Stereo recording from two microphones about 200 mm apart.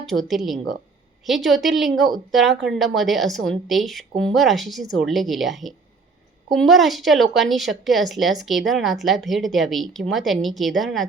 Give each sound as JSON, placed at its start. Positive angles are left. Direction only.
{"t": 0.0, "sound": "a woman's voice", "side_deg": 0}